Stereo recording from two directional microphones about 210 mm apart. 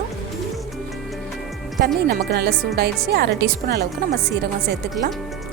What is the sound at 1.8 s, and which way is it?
Speech, 50° right (ahead or behind).